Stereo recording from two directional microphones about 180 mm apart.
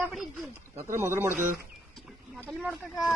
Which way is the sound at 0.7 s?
15° right (ahead or behind).